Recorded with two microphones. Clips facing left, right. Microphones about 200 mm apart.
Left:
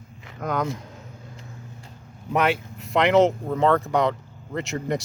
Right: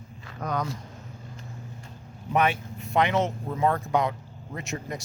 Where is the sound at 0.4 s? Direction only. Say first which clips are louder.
Left 4 dB; 55° left (ahead or behind).